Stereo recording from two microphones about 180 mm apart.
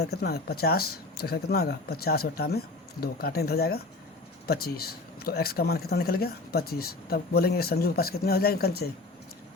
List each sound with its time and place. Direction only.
0.0 s speech: 60° left (ahead or behind)